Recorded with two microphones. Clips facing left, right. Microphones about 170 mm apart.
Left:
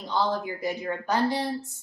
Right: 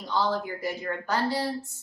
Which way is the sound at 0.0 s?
20° left (ahead or behind).